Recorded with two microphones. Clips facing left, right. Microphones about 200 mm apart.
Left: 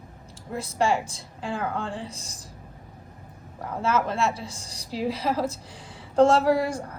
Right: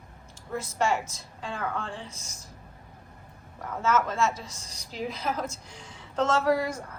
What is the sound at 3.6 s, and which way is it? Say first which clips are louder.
A woman's voice: left 1 dB; 30° left (ahead or behind).